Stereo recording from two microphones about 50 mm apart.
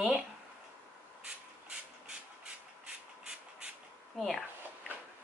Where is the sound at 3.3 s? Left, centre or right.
Centre.